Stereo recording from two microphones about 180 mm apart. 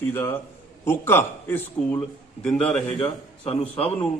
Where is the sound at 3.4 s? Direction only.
30° left (ahead or behind).